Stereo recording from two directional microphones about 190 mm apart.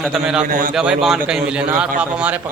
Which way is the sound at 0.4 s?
45° right (ahead or behind).